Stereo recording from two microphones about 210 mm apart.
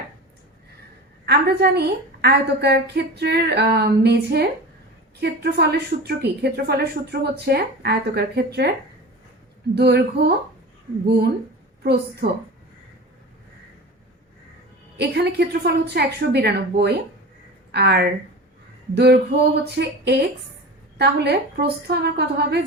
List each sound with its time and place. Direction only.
1.2 s a woman's voice: 50° right (ahead or behind)
9.7 s a woman's voice: 50° right (ahead or behind)
14.9 s a woman's voice: 50° right (ahead or behind)